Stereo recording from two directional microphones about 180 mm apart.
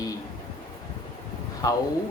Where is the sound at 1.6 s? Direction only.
20° left (ahead or behind).